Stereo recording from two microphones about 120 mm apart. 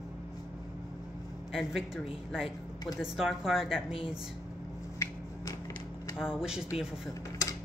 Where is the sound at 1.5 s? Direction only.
Centre (ahead or behind).